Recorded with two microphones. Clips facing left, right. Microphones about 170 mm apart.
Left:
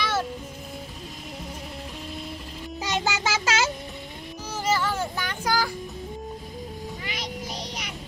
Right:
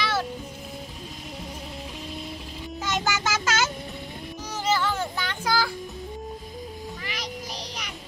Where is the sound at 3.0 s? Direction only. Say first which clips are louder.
Left 1 dB; 30° left (ahead or behind).